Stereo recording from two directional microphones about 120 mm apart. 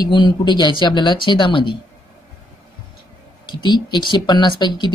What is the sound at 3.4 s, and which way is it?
Speech, 40° left (ahead or behind).